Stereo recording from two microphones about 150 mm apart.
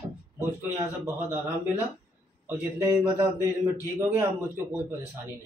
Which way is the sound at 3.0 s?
15° right (ahead or behind).